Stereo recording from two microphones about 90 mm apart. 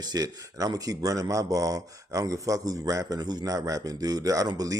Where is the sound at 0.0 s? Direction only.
45° right (ahead or behind).